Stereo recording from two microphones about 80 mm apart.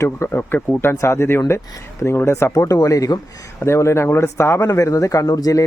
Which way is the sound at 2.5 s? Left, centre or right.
Left.